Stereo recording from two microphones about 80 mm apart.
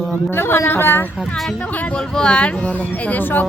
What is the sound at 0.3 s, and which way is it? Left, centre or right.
Speech, left.